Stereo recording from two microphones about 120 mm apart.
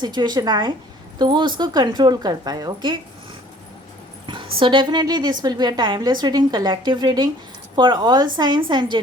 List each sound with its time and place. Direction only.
0.0 s a woman's voice: 40° right (ahead or behind)
4.3 s a woman's voice: 40° right (ahead or behind)